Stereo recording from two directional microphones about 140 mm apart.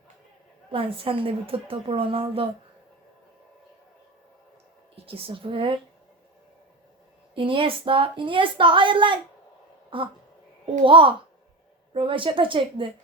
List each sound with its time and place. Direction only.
0.7 s a woman's voice: 40° right (ahead or behind)
5.0 s a woman's voice: 40° right (ahead or behind)
7.3 s a woman's voice: 40° right (ahead or behind)